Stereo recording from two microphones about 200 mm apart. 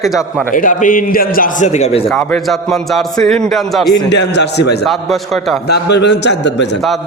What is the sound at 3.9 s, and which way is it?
Speech, 60° left (ahead or behind).